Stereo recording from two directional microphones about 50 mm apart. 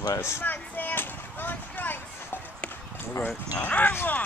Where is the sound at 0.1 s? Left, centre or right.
Left.